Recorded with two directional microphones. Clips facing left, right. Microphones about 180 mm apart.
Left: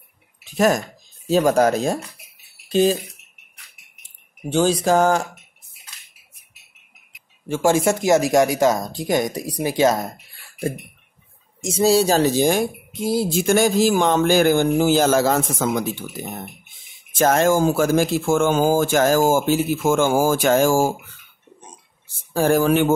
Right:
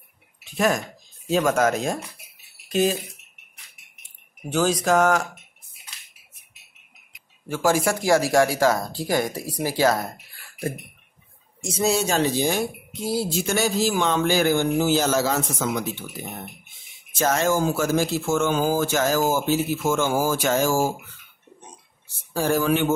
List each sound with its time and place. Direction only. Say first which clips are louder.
1.3 s speech: left 4 dB; 35° left (ahead or behind)
4.5 s speech: left 3 dB; 30° left (ahead or behind)
7.4 s speech: left 4 dB; 25° left (ahead or behind)
11.6 s speech: left 6 dB; 30° left (ahead or behind); by 15.8 s 50° left (ahead or behind)
17.2 s speech: left 5 dB; 55° left (ahead or behind)
22.3 s speech: left 4 dB; 55° left (ahead or behind)